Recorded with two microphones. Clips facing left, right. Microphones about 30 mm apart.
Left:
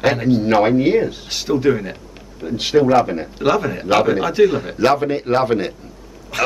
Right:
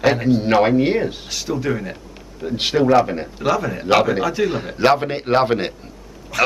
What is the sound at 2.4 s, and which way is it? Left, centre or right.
Speech, centre.